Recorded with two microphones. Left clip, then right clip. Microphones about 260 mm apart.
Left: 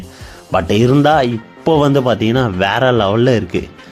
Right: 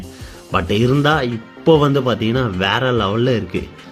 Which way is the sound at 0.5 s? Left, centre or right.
Centre.